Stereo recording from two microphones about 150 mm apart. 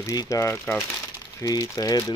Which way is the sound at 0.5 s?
5° left (ahead or behind).